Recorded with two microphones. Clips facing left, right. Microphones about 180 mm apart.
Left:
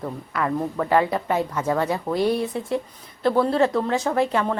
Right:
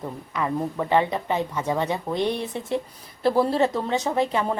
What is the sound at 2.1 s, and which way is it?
Speech, 5° left (ahead or behind).